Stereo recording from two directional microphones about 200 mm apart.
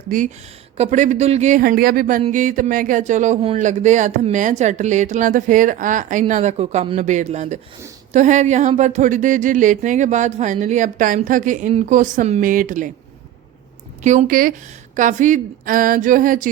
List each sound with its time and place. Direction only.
0.1 s speech: 40° right (ahead or behind)
14.0 s speech: 35° right (ahead or behind)